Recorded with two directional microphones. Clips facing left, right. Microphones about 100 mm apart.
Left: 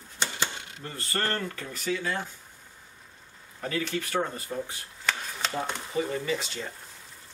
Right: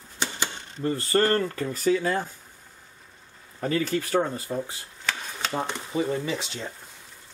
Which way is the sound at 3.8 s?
35° right (ahead or behind).